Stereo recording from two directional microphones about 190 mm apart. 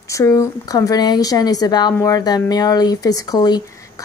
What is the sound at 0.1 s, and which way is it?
A woman's voice, 15° left (ahead or behind).